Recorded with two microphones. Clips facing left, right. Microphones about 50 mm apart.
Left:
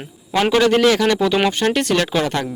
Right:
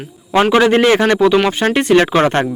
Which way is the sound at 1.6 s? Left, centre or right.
Right.